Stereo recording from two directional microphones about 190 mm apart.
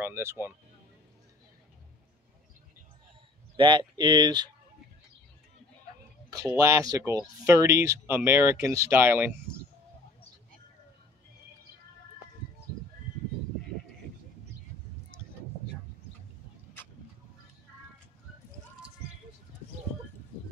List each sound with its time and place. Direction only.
0.0 s speech: 15° right (ahead or behind)
3.5 s speech: 25° right (ahead or behind)
6.3 s speech: 15° right (ahead or behind)